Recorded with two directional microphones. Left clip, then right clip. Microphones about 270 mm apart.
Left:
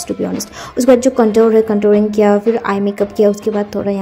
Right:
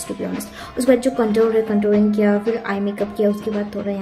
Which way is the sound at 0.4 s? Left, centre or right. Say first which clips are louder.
Left 6 dB; centre.